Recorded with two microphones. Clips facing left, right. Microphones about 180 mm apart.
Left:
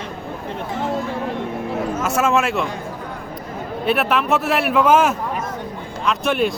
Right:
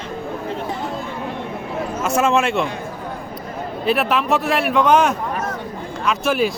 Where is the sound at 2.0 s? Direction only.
Centre (ahead or behind).